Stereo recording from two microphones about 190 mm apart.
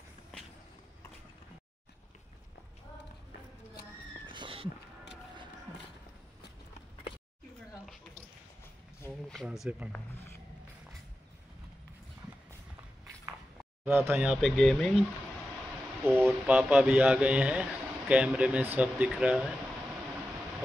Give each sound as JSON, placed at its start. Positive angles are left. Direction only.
{"t": 4.3, "sound": "a sound", "side_deg": -25}
{"t": 9.3, "sound": "speech", "side_deg": 0}
{"t": 9.9, "sound": "speech", "side_deg": 15}
{"t": 13.8, "sound": "speech", "side_deg": -10}
{"t": 16.0, "sound": "a man's voice", "side_deg": -10}